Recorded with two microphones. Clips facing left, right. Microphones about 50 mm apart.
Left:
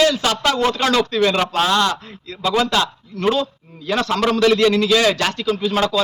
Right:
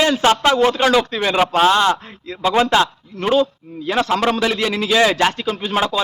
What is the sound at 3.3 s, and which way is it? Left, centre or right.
A man's voice, centre.